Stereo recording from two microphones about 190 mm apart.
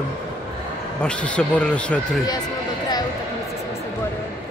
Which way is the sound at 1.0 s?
5° left (ahead or behind).